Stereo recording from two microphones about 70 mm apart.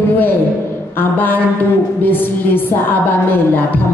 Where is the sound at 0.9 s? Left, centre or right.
Left.